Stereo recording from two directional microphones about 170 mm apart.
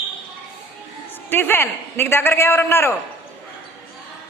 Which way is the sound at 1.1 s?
10° left (ahead or behind).